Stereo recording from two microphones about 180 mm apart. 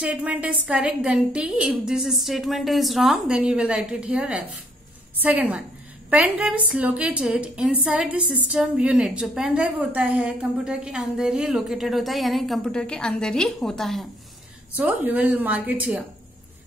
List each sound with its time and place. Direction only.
0.0 s a woman's voice: 5° right (ahead or behind)
14.8 s speech: 10° right (ahead or behind)